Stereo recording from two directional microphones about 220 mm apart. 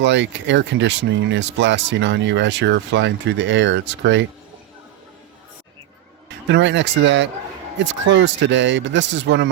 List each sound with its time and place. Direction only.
0.0 s speech: 55° right (ahead or behind)
6.5 s speech: 55° right (ahead or behind)